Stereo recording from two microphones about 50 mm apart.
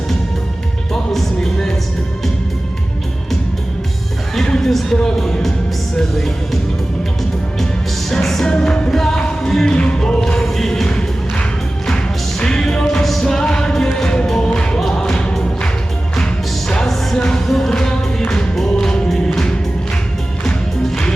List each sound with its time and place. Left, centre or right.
1.1 s music: centre
4.4 s a sound: centre
5.2 s music: centre
8.2 s music: centre
9.7 s music: centre
13.4 s music: centre